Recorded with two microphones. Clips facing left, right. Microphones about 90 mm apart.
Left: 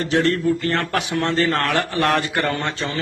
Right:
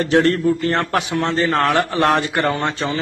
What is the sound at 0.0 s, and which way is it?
Speech, 45° right (ahead or behind).